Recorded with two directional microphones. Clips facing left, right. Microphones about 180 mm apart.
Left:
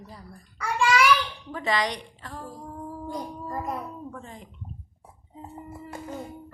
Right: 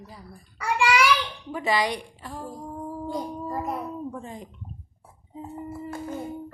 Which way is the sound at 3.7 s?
15° right (ahead or behind).